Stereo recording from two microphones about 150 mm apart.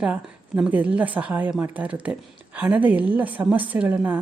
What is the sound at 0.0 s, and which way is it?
A woman's voice, 10° right (ahead or behind).